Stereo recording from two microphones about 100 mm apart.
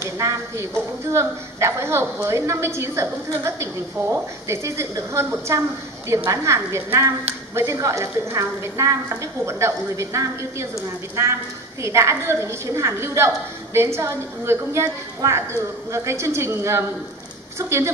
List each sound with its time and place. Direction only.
0.0 s a woman's voice: 30° right (ahead or behind)
11.8 s a woman's voice: 30° right (ahead or behind)